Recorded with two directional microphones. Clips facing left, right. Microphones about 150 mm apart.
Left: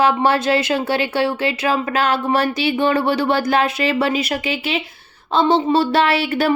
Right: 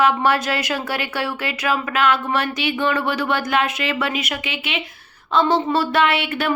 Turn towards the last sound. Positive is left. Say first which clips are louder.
# left 4 dB
turn(degrees=35)  # may be behind; listen again after turning